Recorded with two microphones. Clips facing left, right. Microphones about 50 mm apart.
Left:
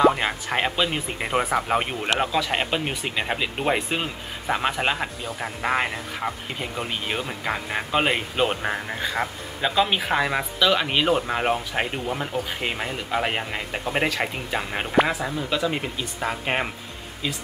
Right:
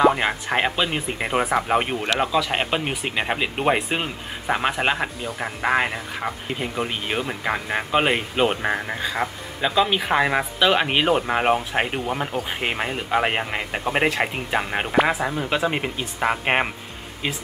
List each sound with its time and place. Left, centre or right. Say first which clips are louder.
0.0 s speech: right 1 dB; centre
9.1 s speech: right 1 dB; centre
9.9 s speech: right 3 dB; centre; by 16.6 s right